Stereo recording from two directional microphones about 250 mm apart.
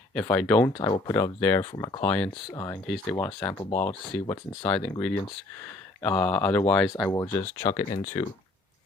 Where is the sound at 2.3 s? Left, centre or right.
Centre.